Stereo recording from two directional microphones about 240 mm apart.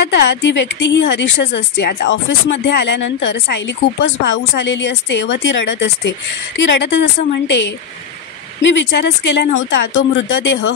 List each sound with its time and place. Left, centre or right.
0.1 s speech: left